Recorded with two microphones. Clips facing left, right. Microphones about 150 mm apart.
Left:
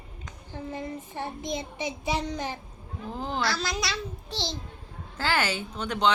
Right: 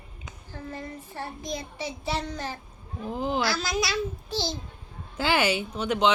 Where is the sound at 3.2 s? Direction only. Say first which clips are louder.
Right 2 dB; 10° right (ahead or behind).